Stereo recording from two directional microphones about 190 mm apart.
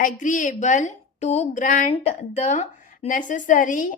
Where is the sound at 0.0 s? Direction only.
40° left (ahead or behind).